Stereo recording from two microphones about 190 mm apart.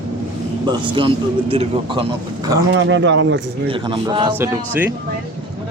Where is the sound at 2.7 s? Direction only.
70° right (ahead or behind).